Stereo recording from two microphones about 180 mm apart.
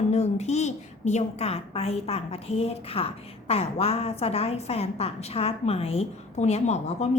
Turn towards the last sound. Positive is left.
turn(degrees=40)  # may be behind; listen again after turning